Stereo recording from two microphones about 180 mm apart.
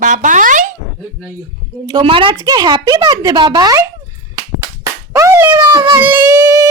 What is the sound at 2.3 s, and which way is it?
Speech, 20° right (ahead or behind).